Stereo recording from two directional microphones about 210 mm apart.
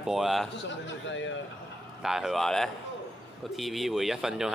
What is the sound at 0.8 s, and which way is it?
Speech, 60° left (ahead or behind).